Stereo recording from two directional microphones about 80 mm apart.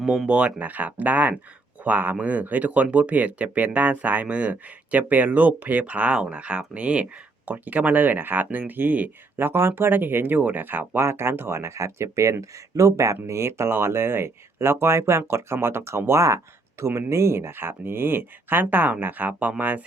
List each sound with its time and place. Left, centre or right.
0.0 s speech: centre